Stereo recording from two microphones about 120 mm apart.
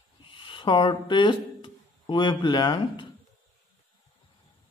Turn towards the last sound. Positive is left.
turn(degrees=40)  # may be behind; listen again after turning